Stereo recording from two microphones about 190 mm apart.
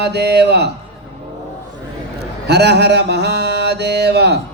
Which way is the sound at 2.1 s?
60° right (ahead or behind).